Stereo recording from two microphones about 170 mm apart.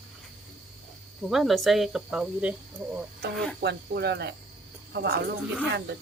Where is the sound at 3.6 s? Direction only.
75° right (ahead or behind).